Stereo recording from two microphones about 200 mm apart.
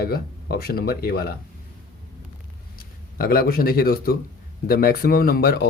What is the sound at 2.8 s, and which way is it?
A man's voice, 50° left (ahead or behind).